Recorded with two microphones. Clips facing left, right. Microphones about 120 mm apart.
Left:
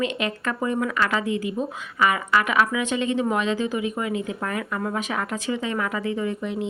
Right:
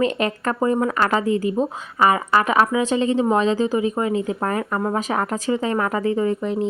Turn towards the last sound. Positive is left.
turn(degrees=-40)  # may be behind; listen again after turning